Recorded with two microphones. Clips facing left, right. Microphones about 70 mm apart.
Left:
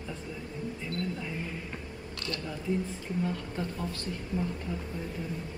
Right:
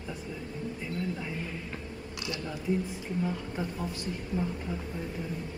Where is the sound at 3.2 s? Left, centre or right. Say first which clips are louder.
Even; centre.